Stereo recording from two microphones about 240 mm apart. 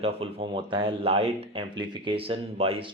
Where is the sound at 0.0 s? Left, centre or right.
Right.